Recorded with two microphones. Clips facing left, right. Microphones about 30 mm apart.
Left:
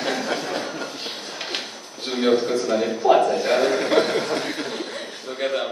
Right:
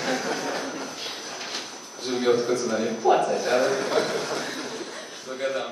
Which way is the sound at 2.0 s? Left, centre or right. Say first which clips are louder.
Left 2 dB; left.